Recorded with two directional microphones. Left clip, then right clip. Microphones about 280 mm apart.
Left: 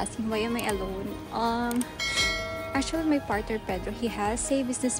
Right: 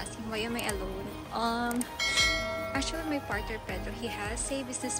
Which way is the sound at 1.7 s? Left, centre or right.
Centre.